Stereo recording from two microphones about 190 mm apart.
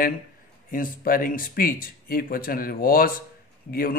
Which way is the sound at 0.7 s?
50° left (ahead or behind).